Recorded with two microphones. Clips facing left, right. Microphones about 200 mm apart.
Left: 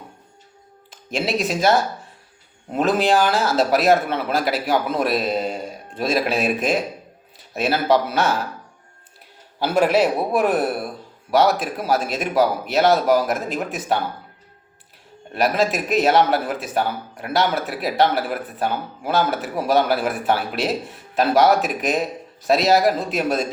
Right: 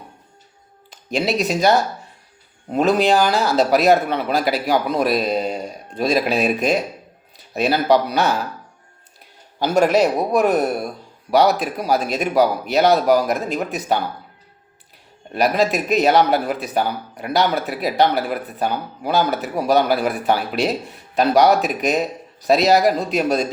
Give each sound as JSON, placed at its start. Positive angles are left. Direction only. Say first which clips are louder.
{"t": 0.9, "sound": "speech", "louder": "right 3 dB", "side_deg": 0}
{"t": 9.7, "sound": "a man's voice", "louder": "right 2 dB", "side_deg": -45}
{"t": 10.7, "sound": "speech", "louder": "right 2 dB", "side_deg": 0}
{"t": 15.3, "sound": "speech", "louder": "right 2 dB", "side_deg": 0}